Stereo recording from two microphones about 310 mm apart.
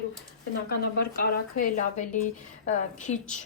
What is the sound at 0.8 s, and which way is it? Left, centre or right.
Speech, left.